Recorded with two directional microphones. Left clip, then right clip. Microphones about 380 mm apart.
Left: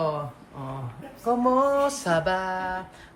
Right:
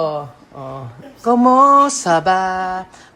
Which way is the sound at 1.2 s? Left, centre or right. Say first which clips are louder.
Right 11 dB; right.